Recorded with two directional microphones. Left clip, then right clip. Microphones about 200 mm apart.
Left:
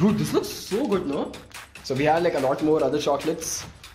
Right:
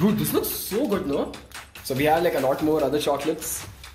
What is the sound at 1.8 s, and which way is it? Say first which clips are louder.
Speech: even; 15° left (ahead or behind).